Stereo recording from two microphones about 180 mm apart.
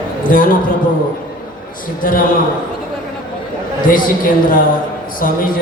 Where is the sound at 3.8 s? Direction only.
50° left (ahead or behind).